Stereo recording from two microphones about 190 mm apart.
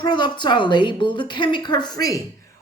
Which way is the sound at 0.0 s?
25° left (ahead or behind).